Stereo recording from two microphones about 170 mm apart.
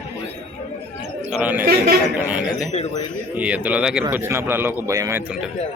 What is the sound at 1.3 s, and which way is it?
A man's voice, 10° right (ahead or behind).